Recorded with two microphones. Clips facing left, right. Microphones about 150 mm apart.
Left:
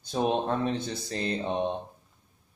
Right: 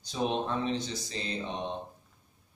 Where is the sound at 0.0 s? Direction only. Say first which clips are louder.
Left 4 dB; 55° left (ahead or behind).